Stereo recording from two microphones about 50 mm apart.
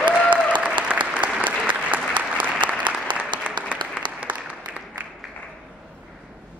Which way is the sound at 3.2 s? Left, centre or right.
Right.